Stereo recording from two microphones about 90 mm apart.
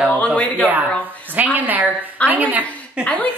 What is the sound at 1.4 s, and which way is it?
A woman's voice, 20° right (ahead or behind).